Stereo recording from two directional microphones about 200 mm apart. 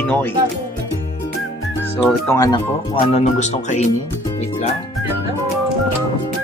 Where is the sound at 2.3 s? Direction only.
20° left (ahead or behind); by 3.8 s 35° left (ahead or behind).